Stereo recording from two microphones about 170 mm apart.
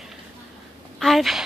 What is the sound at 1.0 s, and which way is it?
Speech, centre (ahead or behind).